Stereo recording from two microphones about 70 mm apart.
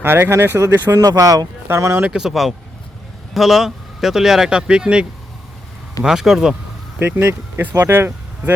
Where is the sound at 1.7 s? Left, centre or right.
Right.